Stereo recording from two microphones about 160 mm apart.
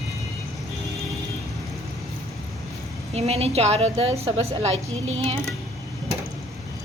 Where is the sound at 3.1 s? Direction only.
40° right (ahead or behind).